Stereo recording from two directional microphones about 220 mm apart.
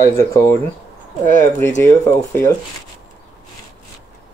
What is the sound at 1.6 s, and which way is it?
Speech, 10° left (ahead or behind).